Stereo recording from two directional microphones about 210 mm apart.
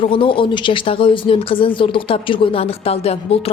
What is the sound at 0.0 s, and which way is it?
Speech, 25° left (ahead or behind).